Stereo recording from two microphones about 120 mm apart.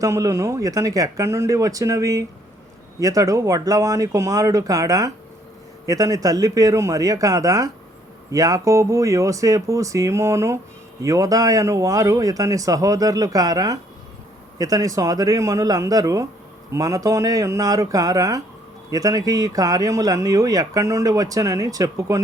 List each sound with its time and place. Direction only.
0.0 s speech: 25° right (ahead or behind)